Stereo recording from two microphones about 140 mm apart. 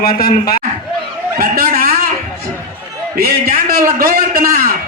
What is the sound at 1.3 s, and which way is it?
Speech, 80° right.